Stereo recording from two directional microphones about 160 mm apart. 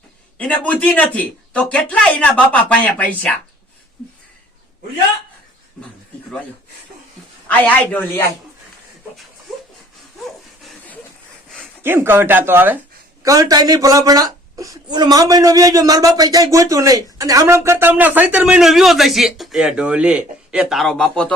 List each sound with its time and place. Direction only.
0.3 s speech: 10° left (ahead or behind)
7.4 s speech: 10° left (ahead or behind)
10.6 s a sound: 5° left (ahead or behind)
11.8 s speech: 15° right (ahead or behind); by 21.3 s 5° left (ahead or behind)